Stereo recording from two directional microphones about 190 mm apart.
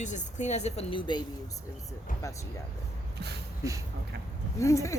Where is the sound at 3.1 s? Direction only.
60° right (ahead or behind).